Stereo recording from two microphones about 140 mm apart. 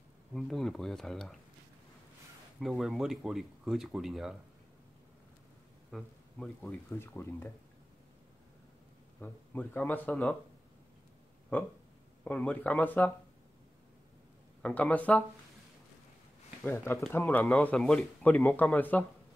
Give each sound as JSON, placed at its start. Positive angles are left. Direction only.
{"t": 0.3, "sound": "speech", "side_deg": 5}
{"t": 2.6, "sound": "speech", "side_deg": 0}
{"t": 5.9, "sound": "speech", "side_deg": 5}
{"t": 9.2, "sound": "speech", "side_deg": 10}
{"t": 11.5, "sound": "speech", "side_deg": 10}
{"t": 14.6, "sound": "speech", "side_deg": 10}
{"t": 16.6, "sound": "speech", "side_deg": 15}